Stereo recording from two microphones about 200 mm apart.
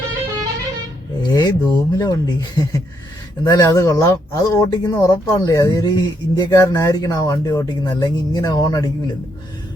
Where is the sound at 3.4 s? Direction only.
20° left (ahead or behind).